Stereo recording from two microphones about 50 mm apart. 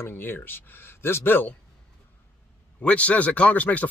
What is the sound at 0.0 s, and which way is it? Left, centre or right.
Speech, left.